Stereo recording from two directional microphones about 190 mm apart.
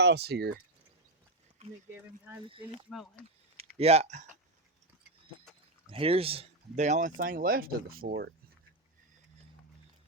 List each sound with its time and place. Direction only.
0.0 s speech: 60° right (ahead or behind)
2.0 s speech: 10° right (ahead or behind)
2.5 s speech: 25° right (ahead or behind)
2.9 s speech: centre (ahead or behind)
3.8 s speech: 35° right (ahead or behind)
5.9 s speech: 30° right (ahead or behind); by 8.3 s 55° right (ahead or behind)